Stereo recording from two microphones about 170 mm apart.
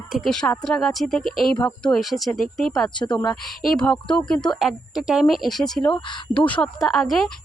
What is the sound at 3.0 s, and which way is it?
Speech, 25° left (ahead or behind).